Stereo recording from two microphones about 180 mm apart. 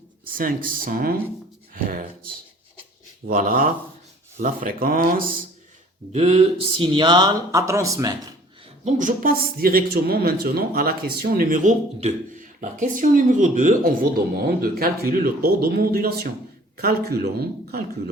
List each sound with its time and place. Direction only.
0.3 s speech: 50° right (ahead or behind)
1.7 s a sound: 50° right (ahead or behind)
3.2 s speech: 50° right (ahead or behind)
6.1 s speech: 35° right (ahead or behind); by 8.3 s 20° right (ahead or behind)
8.8 s speech: 40° right (ahead or behind)